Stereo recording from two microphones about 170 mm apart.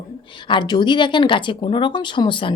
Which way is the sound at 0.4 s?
25° left (ahead or behind).